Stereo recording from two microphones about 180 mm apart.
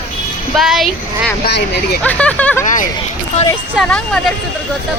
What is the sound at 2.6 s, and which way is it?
Speech, 45° left (ahead or behind).